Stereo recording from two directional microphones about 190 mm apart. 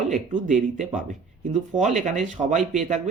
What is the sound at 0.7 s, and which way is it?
Speech, 40° right (ahead or behind).